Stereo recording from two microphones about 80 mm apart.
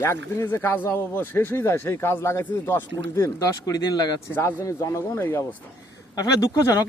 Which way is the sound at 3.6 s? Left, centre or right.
Left.